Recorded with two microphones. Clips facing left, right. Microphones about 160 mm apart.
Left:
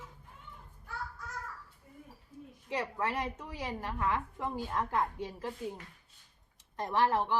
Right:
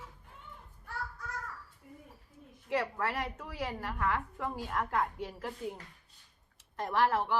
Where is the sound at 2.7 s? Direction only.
20° left (ahead or behind).